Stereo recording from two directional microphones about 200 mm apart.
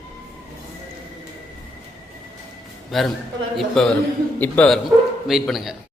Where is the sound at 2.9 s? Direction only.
Centre (ahead or behind).